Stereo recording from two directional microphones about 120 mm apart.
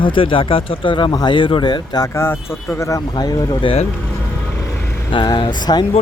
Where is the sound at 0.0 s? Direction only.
45° left (ahead or behind).